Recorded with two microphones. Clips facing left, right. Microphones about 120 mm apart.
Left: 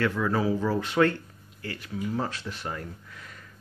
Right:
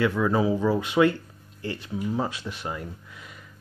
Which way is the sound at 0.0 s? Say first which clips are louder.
Right 3 dB; 15° right (ahead or behind).